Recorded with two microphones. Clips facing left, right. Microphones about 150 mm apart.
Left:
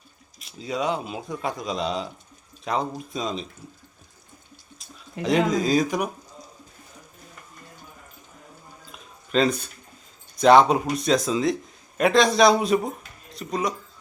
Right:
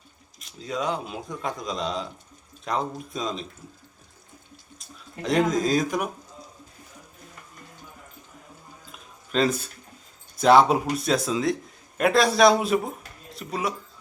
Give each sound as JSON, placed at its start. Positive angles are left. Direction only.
{"t": 0.3, "sound": "speech", "side_deg": 5}
{"t": 5.2, "sound": "speech", "side_deg": 0}
{"t": 8.9, "sound": "a sound", "side_deg": 0}
{"t": 10.3, "sound": "speech", "side_deg": -5}